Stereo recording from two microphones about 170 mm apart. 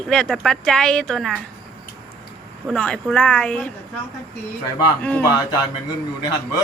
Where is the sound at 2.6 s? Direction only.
5° left (ahead or behind).